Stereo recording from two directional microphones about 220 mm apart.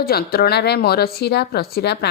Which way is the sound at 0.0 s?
45° left (ahead or behind).